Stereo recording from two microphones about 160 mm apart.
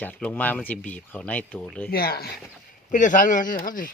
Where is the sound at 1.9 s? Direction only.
75° left (ahead or behind).